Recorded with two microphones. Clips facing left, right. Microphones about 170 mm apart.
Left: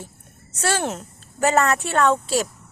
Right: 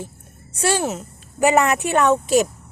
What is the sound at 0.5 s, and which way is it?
A woman's voice, 10° right (ahead or behind).